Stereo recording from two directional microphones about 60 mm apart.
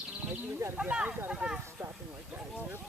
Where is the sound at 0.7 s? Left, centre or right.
Right.